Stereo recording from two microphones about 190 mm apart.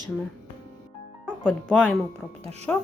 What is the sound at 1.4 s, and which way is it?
A woman's voice, 5° left (ahead or behind).